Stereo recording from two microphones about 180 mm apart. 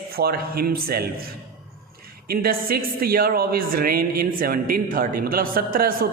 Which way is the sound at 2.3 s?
55° right (ahead or behind).